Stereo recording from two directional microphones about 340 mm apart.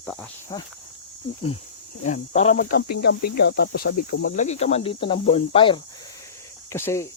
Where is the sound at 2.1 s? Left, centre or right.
Centre.